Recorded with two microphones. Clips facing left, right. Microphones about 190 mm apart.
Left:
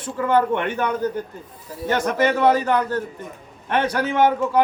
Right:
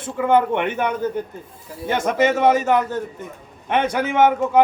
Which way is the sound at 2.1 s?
20° right (ahead or behind).